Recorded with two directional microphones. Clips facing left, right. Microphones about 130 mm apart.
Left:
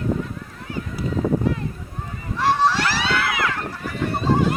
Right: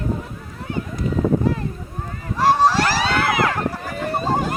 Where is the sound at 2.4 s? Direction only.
40° right (ahead or behind).